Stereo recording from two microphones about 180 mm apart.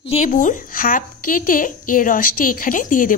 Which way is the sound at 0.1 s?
45° left (ahead or behind).